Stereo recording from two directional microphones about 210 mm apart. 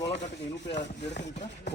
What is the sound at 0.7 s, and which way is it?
Speech, 55° left (ahead or behind).